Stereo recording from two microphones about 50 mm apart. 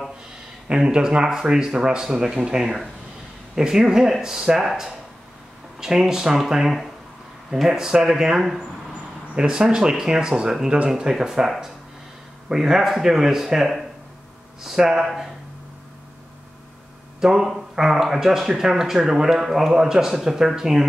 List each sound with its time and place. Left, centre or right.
0.7 s speech: centre
17.2 s speech: centre